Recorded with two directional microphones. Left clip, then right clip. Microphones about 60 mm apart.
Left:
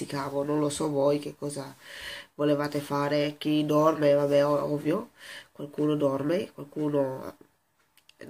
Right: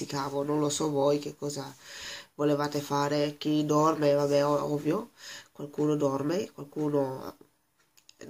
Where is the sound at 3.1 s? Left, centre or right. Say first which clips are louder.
Left 2 dB; centre.